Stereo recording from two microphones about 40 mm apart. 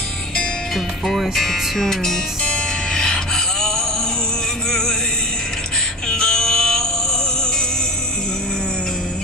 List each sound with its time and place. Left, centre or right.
0.7 s speech: centre
2.4 s music: centre
6.0 s music: centre